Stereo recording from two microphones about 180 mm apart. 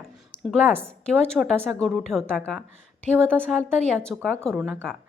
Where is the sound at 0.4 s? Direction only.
5° left (ahead or behind).